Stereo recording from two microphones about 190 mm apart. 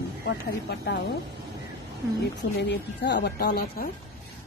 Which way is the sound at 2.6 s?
65° left (ahead or behind).